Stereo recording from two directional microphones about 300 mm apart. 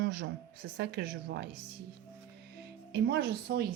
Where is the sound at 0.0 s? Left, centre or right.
Right.